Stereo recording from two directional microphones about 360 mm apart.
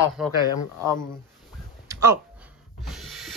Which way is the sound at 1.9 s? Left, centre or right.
Centre.